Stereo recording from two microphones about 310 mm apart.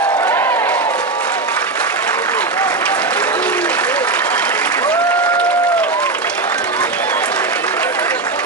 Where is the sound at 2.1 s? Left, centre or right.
Centre.